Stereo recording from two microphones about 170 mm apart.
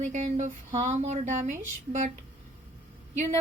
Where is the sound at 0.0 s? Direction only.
45° right (ahead or behind).